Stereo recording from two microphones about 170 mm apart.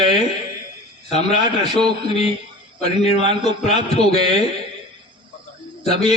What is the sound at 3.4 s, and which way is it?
A man's voice, 40° left (ahead or behind).